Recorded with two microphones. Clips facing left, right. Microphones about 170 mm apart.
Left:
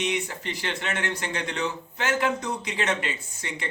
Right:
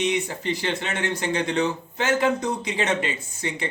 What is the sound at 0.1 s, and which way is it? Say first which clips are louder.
Speech: right 4 dB; 25° right (ahead or behind).